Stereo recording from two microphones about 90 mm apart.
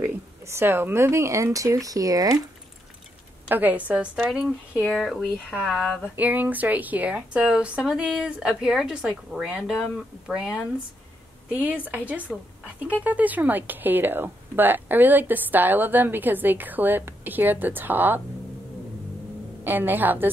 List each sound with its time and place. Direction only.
0.0 s speech: 25° right (ahead or behind)
3.4 s speech: 20° right (ahead or behind); by 6.0 s 5° left (ahead or behind)
6.1 s speech: 20° right (ahead or behind)
19.6 s speech: 20° right (ahead or behind)